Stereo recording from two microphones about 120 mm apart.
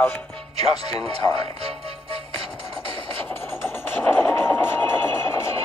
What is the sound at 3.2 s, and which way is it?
Music, 20° left (ahead or behind).